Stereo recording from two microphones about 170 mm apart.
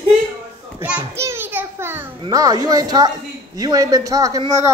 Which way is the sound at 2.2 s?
20° right (ahead or behind).